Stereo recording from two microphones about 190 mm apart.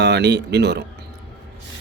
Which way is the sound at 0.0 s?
65° right (ahead or behind).